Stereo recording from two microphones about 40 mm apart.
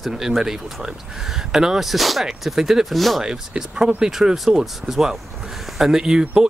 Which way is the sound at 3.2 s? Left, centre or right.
Centre.